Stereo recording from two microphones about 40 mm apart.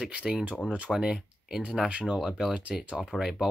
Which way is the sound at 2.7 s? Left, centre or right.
Centre.